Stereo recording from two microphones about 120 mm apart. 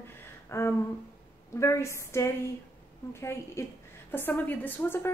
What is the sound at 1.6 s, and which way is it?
A woman's voice, 25° left (ahead or behind).